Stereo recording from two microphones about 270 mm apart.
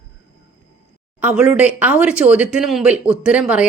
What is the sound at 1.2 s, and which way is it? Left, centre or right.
A woman's voice, centre.